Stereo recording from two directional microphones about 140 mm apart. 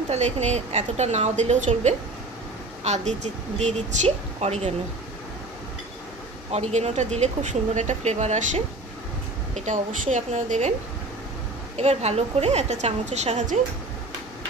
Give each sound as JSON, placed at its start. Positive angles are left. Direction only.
{"t": 0.1, "sound": "a woman's voice", "side_deg": -55}
{"t": 6.5, "sound": "a woman's voice", "side_deg": -50}
{"t": 9.7, "sound": "a woman's voice", "side_deg": -60}
{"t": 11.7, "sound": "a woman's voice", "side_deg": -50}